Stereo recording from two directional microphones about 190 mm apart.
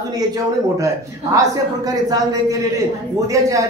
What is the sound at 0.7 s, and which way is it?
A man's voice, 15° right (ahead or behind).